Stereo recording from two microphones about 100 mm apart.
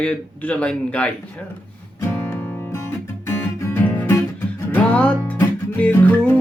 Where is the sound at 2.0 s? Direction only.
25° left (ahead or behind).